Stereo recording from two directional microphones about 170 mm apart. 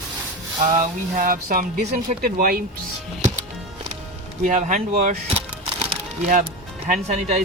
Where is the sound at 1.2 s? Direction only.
55° right (ahead or behind).